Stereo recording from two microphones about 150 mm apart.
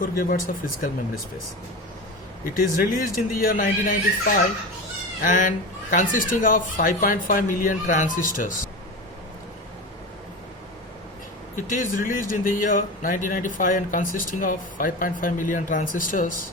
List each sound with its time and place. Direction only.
0.0 s speech: 70° left (ahead or behind)
2.4 s speech: 70° left (ahead or behind)
5.2 s speech: 60° left (ahead or behind)
11.5 s speech: 60° left (ahead or behind)